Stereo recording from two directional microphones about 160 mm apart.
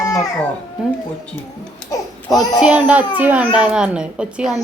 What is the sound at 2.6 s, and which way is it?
A woman's voice, 10° right (ahead or behind).